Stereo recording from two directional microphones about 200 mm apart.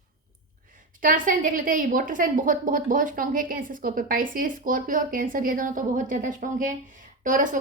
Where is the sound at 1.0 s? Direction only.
45° right (ahead or behind).